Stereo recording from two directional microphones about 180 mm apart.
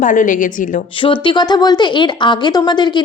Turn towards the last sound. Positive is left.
turn(degrees=25)  # may be behind; listen again after turning